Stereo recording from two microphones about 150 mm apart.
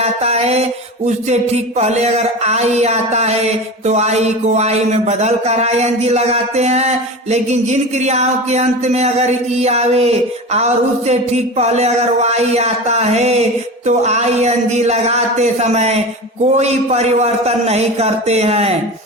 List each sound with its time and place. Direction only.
0.0 s music: 45° right (ahead or behind)